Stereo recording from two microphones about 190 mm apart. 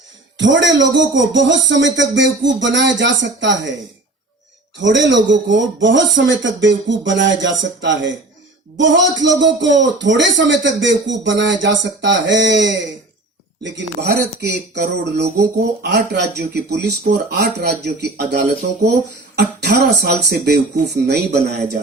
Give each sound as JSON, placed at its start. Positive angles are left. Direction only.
{"t": 0.3, "sound": "speech", "side_deg": -75}
{"t": 4.8, "sound": "speech", "side_deg": -75}